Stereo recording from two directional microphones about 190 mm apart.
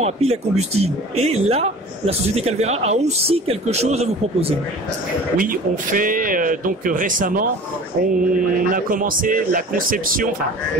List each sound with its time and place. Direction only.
0.0 s speech: 35° right (ahead or behind)
5.4 s speech: 45° right (ahead or behind)
8.7 s speech: 45° right (ahead or behind)